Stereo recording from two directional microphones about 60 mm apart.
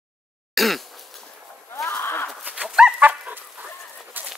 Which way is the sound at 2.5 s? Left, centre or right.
Centre.